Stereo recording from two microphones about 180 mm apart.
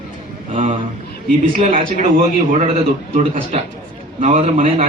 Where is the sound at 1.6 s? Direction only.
45° right (ahead or behind).